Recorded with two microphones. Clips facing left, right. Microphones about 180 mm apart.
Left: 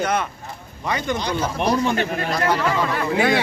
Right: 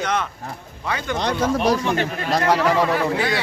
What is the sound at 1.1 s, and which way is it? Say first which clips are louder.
Speech: right 3 dB; 75° right (ahead or behind).